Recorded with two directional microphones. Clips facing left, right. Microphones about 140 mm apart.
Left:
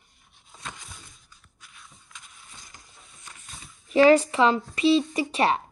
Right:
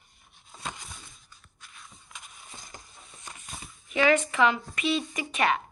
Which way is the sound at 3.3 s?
15° right (ahead or behind).